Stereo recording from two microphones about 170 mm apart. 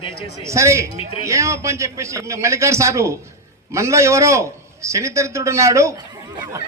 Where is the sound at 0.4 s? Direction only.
15° right (ahead or behind).